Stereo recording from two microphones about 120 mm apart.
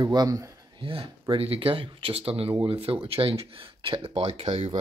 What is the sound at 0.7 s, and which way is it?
Speech, 45° right (ahead or behind).